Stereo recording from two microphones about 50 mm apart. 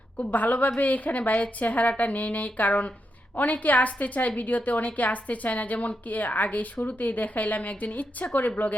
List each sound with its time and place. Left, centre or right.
0.2 s a woman's voice: left